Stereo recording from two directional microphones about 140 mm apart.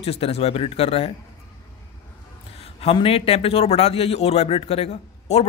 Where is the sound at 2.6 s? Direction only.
45° left (ahead or behind).